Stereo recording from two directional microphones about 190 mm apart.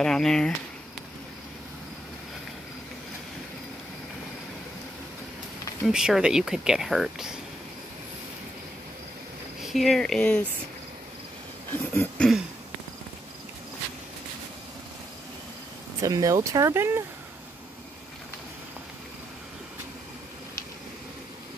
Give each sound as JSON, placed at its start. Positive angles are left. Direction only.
{"t": 0.0, "sound": "speech", "side_deg": 5}
{"t": 5.9, "sound": "speech", "side_deg": -5}
{"t": 9.6, "sound": "speech", "side_deg": 0}
{"t": 11.7, "sound": "a sound", "side_deg": 10}
{"t": 16.0, "sound": "speech", "side_deg": -20}